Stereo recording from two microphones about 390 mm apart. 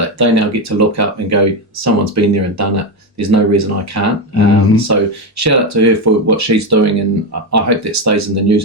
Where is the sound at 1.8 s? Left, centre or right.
Right.